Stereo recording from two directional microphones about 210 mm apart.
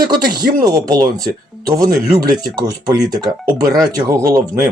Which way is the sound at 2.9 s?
20° right (ahead or behind).